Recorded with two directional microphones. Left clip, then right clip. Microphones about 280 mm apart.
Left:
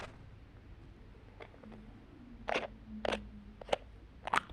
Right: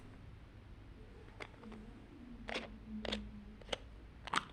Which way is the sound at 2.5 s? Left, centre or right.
Centre.